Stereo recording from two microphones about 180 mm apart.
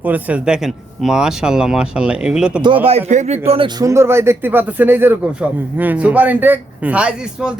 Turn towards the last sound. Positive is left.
turn(degrees=-5)  # may be behind; listen again after turning